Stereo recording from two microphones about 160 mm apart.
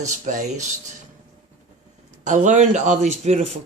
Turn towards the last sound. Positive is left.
turn(degrees=-45)  # may be behind; listen again after turning